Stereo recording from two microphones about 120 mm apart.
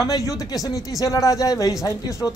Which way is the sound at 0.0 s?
30° left (ahead or behind).